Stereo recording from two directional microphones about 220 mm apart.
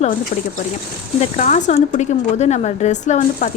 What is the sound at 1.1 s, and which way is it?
Speech, 30° left (ahead or behind).